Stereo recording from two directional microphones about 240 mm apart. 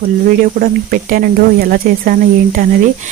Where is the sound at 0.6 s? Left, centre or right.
Right.